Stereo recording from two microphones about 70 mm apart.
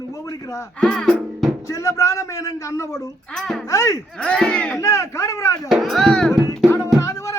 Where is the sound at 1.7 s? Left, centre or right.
Left.